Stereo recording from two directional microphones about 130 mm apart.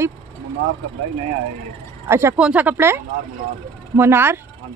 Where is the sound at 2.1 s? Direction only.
20° right (ahead or behind).